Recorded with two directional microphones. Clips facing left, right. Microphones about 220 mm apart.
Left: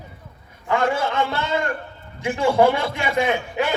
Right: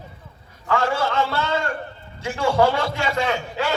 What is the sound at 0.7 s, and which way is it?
Speech, 20° left (ahead or behind).